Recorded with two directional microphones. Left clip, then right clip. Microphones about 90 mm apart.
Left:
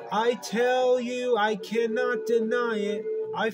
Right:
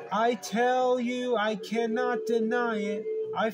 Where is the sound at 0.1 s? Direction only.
40° left (ahead or behind).